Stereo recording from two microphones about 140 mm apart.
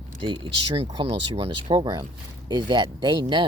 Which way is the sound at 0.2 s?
35° right (ahead or behind).